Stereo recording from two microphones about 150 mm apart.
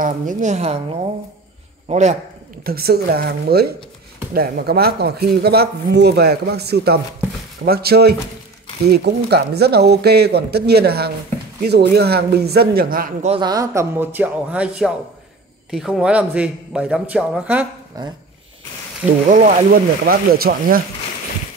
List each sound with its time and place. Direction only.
0.0 s a woman's voice: 60° right (ahead or behind)
1.9 s a man's voice: 50° right (ahead or behind)
2.6 s speech: 90° right
13.4 s a man's voice: 25° right (ahead or behind); by 17.6 s 10° right (ahead or behind)
17.9 s speech: 25° right (ahead or behind)
19.2 s speech: 60° right (ahead or behind); by 20.8 s 80° right